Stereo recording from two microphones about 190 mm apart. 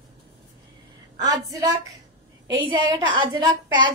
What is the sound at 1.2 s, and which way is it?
A woman's voice, 20° right (ahead or behind).